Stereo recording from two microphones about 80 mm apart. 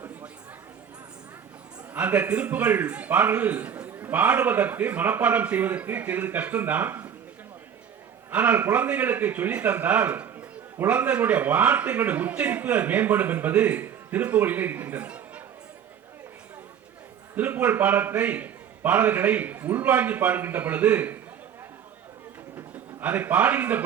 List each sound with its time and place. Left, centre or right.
1.9 s a man's voice: centre
8.3 s a man's voice: centre
17.3 s a man's voice: right
22.5 s a man's voice: right